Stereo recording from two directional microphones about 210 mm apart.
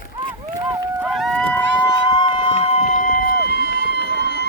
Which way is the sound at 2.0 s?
20° left (ahead or behind).